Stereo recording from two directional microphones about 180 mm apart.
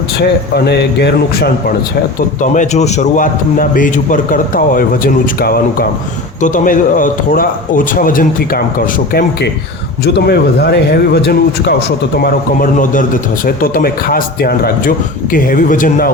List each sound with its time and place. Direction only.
0.5 s a man's voice: 65° left (ahead or behind)
2.4 s a man's voice: 40° left (ahead or behind)
10.2 s a man's voice: 65° left (ahead or behind); by 16.0 s 50° left (ahead or behind)